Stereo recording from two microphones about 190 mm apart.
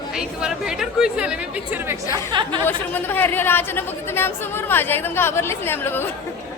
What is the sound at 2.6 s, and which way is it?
Speech, 10° left (ahead or behind).